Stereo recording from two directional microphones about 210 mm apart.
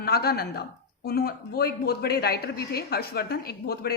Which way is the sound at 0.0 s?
50° left (ahead or behind).